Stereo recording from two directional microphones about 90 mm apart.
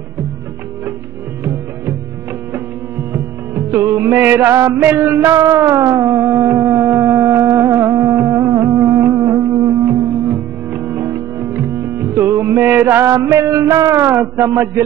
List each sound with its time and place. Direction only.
3.1 s music: 20° right (ahead or behind)
11.1 s music: 25° right (ahead or behind)
12.1 s mantra: 20° right (ahead or behind)